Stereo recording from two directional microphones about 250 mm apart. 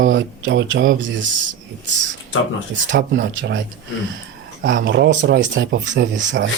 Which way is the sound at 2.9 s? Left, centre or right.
Right.